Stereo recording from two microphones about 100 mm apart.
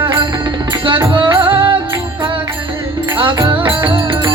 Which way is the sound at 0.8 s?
55° right (ahead or behind).